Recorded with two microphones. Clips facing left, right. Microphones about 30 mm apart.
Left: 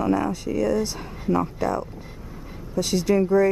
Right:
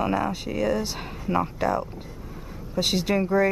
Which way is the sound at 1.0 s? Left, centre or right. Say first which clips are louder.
Left 2 dB; right.